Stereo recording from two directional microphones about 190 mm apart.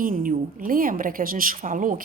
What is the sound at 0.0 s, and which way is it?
A woman's voice, 45° right (ahead or behind).